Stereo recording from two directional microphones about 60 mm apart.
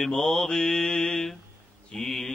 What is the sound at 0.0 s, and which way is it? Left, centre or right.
Mantra, centre.